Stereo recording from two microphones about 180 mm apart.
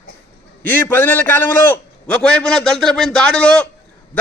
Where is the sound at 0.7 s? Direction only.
10° left (ahead or behind).